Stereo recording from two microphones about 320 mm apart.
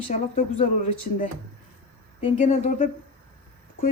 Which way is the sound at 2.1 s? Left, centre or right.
Left.